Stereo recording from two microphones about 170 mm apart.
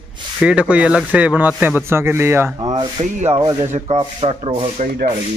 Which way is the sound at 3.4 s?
25° right (ahead or behind).